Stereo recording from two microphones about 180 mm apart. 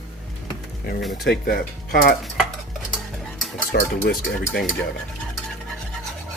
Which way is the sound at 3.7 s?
60° left (ahead or behind).